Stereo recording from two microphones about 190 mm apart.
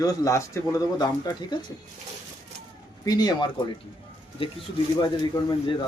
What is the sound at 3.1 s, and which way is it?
Speech, 20° left (ahead or behind).